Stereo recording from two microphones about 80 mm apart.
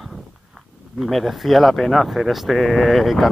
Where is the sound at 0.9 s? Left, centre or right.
Centre.